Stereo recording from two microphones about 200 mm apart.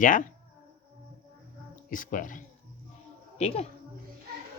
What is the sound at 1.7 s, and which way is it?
A man's voice, 40° left (ahead or behind).